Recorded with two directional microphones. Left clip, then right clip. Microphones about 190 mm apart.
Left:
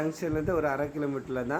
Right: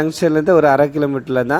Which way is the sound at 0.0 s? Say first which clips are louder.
Right 15 dB; 45° right (ahead or behind).